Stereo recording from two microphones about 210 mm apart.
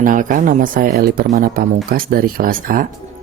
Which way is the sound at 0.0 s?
40° right (ahead or behind).